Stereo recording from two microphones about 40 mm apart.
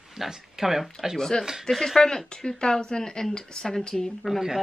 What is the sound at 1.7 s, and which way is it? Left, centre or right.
Speech, centre.